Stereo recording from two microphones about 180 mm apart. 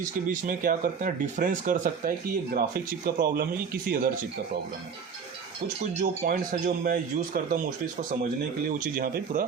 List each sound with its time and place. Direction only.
0.0 s speech: 50° right (ahead or behind)
6.0 s speech: 50° right (ahead or behind)
8.8 s speech: 50° right (ahead or behind)